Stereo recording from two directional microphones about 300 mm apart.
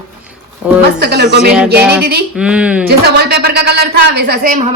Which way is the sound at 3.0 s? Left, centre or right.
Right.